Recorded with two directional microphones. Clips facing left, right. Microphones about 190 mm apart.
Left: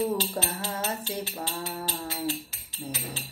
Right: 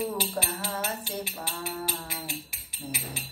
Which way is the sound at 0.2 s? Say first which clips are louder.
Left 1 dB; 10° right (ahead or behind).